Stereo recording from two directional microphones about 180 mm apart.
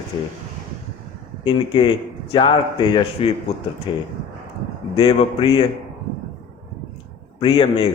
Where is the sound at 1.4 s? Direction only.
25° left (ahead or behind).